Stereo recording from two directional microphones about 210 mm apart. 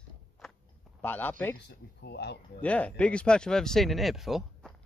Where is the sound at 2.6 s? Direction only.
5° left (ahead or behind).